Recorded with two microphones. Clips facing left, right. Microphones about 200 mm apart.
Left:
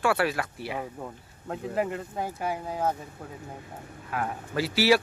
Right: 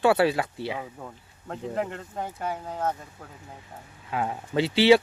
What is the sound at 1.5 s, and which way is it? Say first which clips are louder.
Speech: left 1 dB; 5° left (ahead or behind).